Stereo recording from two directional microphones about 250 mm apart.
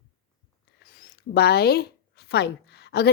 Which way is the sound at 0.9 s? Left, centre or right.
Left.